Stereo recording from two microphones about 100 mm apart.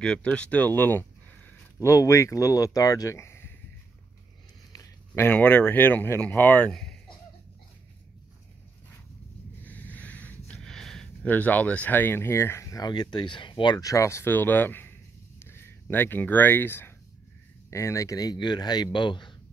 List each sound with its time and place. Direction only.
0.0 s speech: 10° left (ahead or behind)
1.8 s speech: 30° left (ahead or behind)
5.1 s speech: 20° left (ahead or behind)
9.6 s sniff: 15° left (ahead or behind)
11.2 s speech: 15° left (ahead or behind)
12.8 s speech: 45° left (ahead or behind)